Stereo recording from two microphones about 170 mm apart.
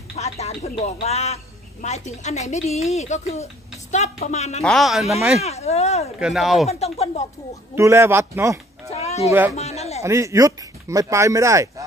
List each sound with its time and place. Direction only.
0.1 s a man's voice: 40° left (ahead or behind)
4.6 s speech: centre (ahead or behind)
5.4 s a man's voice: 40° left (ahead or behind)
6.1 s speech: 5° right (ahead or behind)
6.7 s a man's voice: 40° left (ahead or behind)
7.7 s speech: 15° right (ahead or behind)
8.9 s cat: 40° left (ahead or behind)
9.6 s a sound: 40° left (ahead or behind)
10.0 s speech: 15° right (ahead or behind)